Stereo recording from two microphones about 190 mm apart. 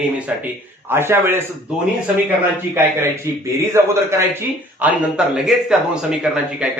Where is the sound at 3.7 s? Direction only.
15° right (ahead or behind).